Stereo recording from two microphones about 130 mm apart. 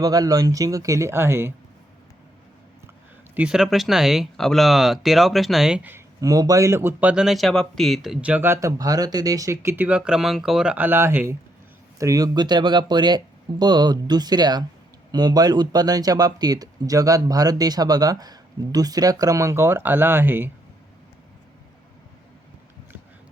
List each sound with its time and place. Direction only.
0.0 s speech: 30° right (ahead or behind)
3.3 s speech: 5° right (ahead or behind)
6.1 s speech: 25° right (ahead or behind)